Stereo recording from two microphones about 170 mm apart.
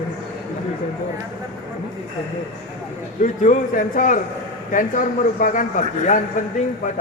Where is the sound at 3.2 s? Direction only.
50° left (ahead or behind).